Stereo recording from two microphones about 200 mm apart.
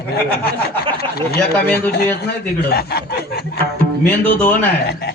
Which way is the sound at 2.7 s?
55° left (ahead or behind).